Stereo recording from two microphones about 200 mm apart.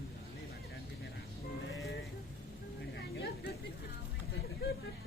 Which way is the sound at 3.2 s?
50° left (ahead or behind).